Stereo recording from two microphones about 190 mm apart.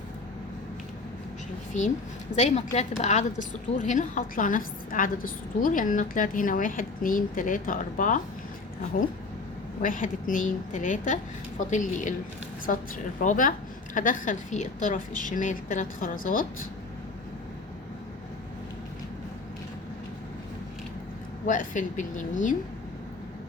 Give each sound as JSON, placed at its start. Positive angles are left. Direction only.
{"t": 2.3, "sound": "a woman's voice", "side_deg": 35}
{"t": 9.8, "sound": "a woman's voice", "side_deg": 45}
{"t": 21.4, "sound": "a woman's voice", "side_deg": 45}